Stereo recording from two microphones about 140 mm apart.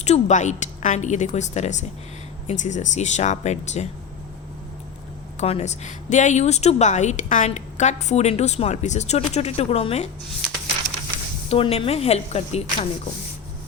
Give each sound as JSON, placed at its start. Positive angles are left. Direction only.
{"t": 0.0, "sound": "a woman's voice", "side_deg": 55}
{"t": 5.4, "sound": "speech", "side_deg": 55}
{"t": 11.4, "sound": "speech", "side_deg": 45}